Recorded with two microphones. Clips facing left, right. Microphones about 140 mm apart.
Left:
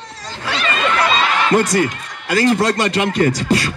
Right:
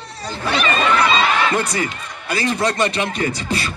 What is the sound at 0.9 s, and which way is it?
Chatter, 45° left (ahead or behind).